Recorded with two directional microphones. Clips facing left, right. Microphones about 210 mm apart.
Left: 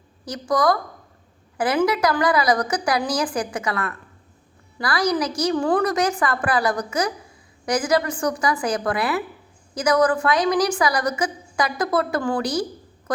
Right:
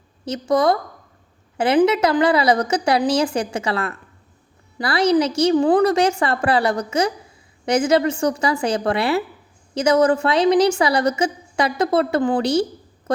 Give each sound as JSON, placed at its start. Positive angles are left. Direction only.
{"t": 0.3, "sound": "a woman's voice", "side_deg": -25}